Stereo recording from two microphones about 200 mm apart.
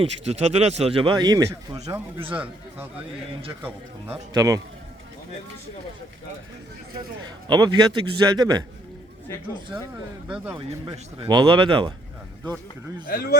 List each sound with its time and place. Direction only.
0.0 s a man's voice: 30° right (ahead or behind)
2.3 s a man's voice: 5° right (ahead or behind)
6.9 s a man's voice: 20° right (ahead or behind)
10.3 s speech: 5° right (ahead or behind)
10.8 s a man's voice: 25° right (ahead or behind)
13.1 s speech: 50° left (ahead or behind)